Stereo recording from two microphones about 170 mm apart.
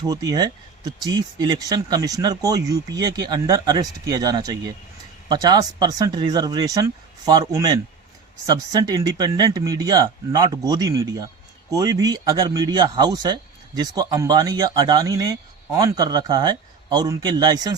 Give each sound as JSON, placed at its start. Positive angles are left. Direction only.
{"t": 0.1, "sound": "speech", "side_deg": -20}